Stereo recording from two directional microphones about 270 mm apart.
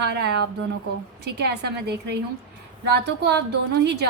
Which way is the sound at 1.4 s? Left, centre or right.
Right.